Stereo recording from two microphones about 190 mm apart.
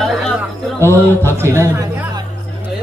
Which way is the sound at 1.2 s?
15° right (ahead or behind).